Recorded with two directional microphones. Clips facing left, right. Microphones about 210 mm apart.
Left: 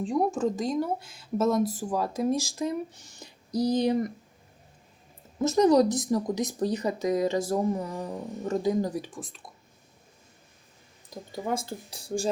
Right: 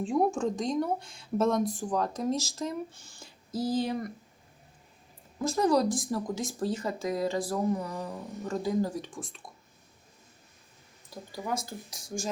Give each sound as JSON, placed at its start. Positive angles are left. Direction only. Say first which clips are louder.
{"t": 0.0, "sound": "speech", "louder": "left 1 dB", "side_deg": 0}
{"t": 5.4, "sound": "speech", "louder": "left 5 dB", "side_deg": 25}
{"t": 9.0, "sound": "speech", "louder": "left 3 dB", "side_deg": 5}
{"t": 11.1, "sound": "speech", "louder": "left 3 dB", "side_deg": 25}